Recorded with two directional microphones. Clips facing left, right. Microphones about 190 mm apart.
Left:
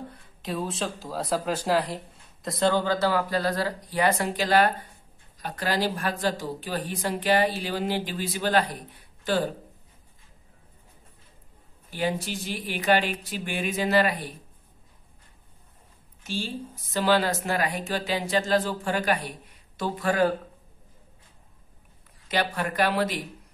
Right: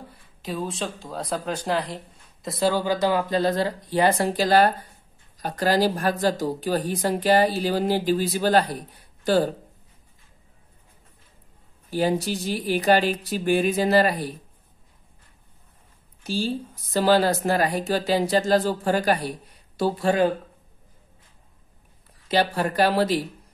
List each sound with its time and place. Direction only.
0.1 s speech: centre (ahead or behind); by 8.7 s 40° right (ahead or behind)
11.9 s speech: 40° right (ahead or behind)
16.2 s speech: 35° right (ahead or behind)
22.3 s speech: 30° right (ahead or behind)